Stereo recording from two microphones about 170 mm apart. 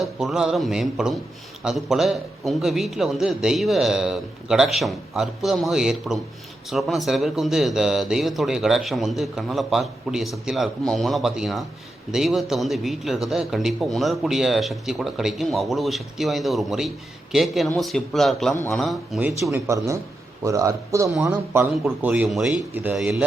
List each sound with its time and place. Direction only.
0.0 s speech: centre (ahead or behind)
19.3 s speech: 15° right (ahead or behind)